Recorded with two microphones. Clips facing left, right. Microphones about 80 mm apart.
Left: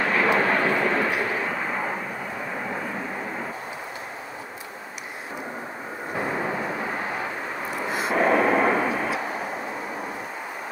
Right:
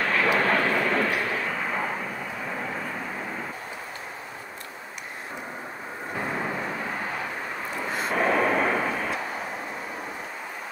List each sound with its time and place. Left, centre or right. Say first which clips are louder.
0.0 s vehicle: left 2 dB; centre
1.3 s a sound: left 1 dB; centre
6.1 s vehicle: left 3 dB; centre
7.7 s vehicle: left 3 dB; centre